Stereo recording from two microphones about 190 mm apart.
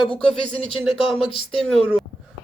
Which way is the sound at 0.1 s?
5° left (ahead or behind).